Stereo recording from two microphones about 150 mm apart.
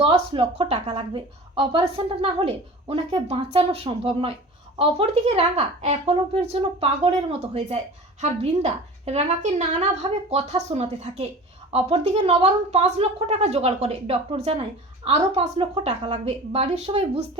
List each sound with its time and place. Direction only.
0.0 s a woman's voice: 35° right (ahead or behind)